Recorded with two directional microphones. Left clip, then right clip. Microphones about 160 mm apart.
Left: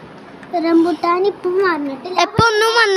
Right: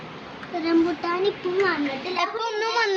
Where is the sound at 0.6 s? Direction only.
80° left.